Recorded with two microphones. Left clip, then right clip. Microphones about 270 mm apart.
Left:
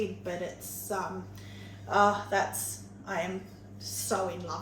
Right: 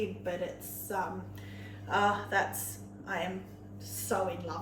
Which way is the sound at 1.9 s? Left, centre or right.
Centre.